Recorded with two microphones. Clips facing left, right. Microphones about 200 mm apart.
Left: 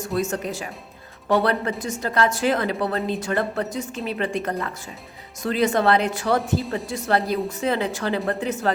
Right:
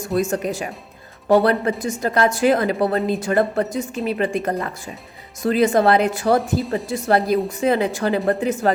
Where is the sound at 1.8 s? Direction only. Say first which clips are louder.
Right 2 dB; 10° right (ahead or behind).